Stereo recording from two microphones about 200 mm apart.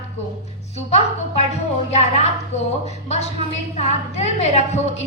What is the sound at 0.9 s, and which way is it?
Speech, 35° left (ahead or behind).